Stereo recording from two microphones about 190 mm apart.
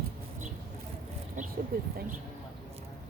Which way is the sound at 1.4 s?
40° right (ahead or behind).